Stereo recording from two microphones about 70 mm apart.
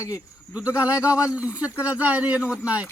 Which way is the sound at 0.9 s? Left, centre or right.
Left.